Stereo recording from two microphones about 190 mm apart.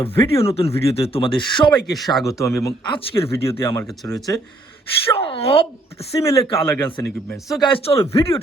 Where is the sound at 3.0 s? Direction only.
30° left (ahead or behind).